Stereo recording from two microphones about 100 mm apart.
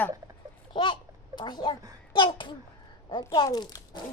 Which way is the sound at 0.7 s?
55° left (ahead or behind).